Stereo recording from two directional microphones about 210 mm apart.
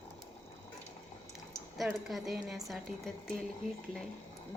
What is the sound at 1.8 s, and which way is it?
A woman's voice, centre (ahead or behind).